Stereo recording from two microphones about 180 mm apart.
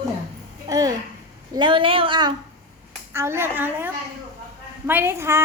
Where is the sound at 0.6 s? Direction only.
20° right (ahead or behind).